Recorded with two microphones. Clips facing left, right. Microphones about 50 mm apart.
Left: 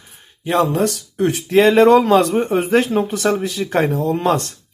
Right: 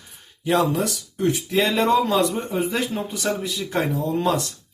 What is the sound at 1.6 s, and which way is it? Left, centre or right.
Speech, left.